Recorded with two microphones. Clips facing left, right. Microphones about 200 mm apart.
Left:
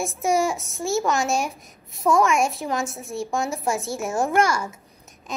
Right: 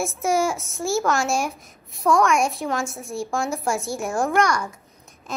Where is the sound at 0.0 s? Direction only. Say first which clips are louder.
Even; centre (ahead or behind).